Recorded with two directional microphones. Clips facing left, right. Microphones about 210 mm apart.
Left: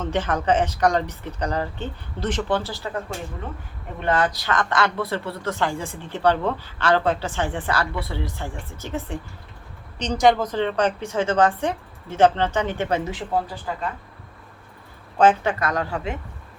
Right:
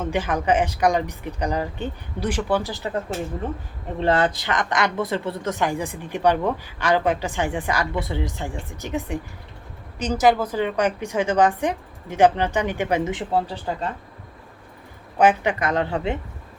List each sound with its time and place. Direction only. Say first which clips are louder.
0.0 s speech: even; 10° right (ahead or behind)
4.0 s a woman's voice: right 2 dB; 25° right (ahead or behind)
15.2 s a woman's voice: even; 15° right (ahead or behind)